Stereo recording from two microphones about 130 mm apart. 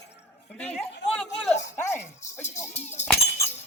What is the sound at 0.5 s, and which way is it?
Chatter, 5° left (ahead or behind).